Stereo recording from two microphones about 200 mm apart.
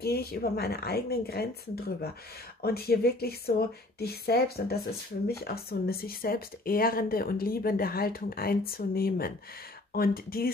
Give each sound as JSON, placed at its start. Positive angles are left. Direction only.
{"t": 0.0, "sound": "speech", "side_deg": 50}
{"t": 2.6, "sound": "speech", "side_deg": 50}